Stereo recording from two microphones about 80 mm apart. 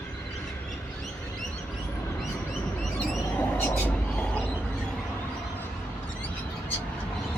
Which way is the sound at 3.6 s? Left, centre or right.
Centre.